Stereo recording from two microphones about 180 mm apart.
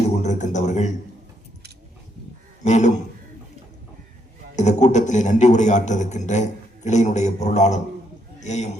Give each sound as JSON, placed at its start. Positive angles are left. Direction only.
{"t": 0.2, "sound": "a sound", "side_deg": 40}
{"t": 2.6, "sound": "a man's voice", "side_deg": 40}
{"t": 4.5, "sound": "a man's voice", "side_deg": 40}